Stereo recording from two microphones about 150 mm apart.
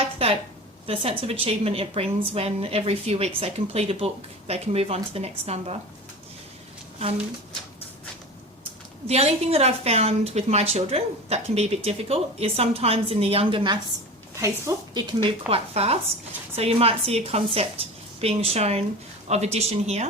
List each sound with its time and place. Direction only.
0.0 s a sound: 40° right (ahead or behind)
1.3 s speech: 40° right (ahead or behind)
9.0 s a woman's voice: 45° right (ahead or behind)
14.4 s speech: 25° right (ahead or behind)
15.4 s a woman's voice: 40° right (ahead or behind)